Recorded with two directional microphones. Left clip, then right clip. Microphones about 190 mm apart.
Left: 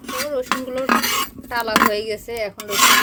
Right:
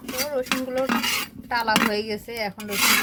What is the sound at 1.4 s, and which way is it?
Speech, 35° left (ahead or behind).